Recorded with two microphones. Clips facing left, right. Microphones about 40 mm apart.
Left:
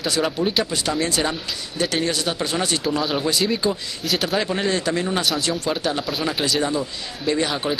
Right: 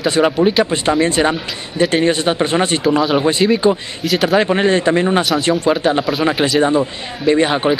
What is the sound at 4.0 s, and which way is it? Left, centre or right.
Speech, centre.